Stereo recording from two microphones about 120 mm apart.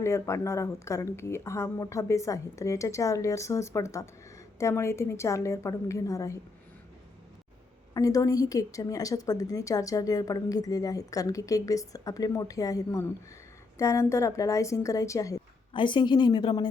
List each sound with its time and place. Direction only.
0.0 s a woman's voice: 25° left (ahead or behind)
7.9 s a woman's voice: 30° left (ahead or behind)
15.7 s a woman's voice: 40° left (ahead or behind)